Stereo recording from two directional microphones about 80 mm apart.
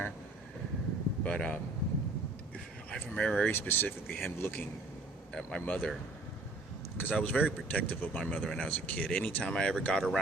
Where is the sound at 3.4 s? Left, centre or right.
Left.